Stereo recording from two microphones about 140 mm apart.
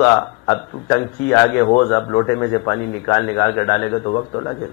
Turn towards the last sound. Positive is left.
turn(degrees=30)  # may be behind; listen again after turning